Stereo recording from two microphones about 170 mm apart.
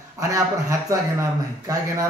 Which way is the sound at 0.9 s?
20° right (ahead or behind).